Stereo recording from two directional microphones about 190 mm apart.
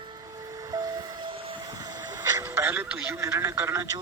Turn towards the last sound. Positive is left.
turn(degrees=-15)  # may be behind; listen again after turning